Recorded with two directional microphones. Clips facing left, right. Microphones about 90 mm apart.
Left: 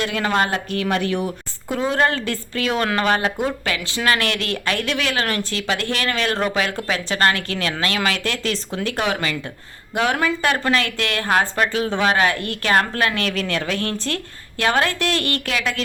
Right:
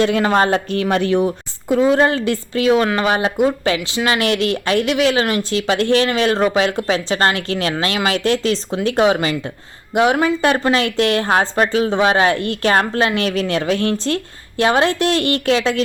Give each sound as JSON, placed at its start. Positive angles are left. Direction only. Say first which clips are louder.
{"t": 0.0, "sound": "a woman's voice", "louder": "right 6 dB", "side_deg": -30}